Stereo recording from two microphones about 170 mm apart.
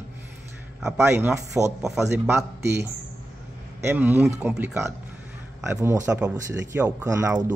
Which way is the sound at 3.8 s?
10° right (ahead or behind).